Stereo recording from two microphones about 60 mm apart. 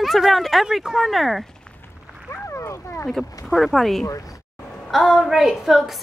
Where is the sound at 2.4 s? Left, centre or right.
Left.